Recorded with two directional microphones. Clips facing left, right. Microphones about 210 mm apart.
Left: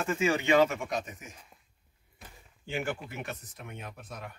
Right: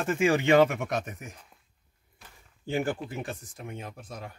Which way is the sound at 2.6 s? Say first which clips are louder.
Right 5 dB; 40° right (ahead or behind).